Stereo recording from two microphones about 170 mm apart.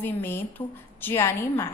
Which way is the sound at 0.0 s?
10° left (ahead or behind).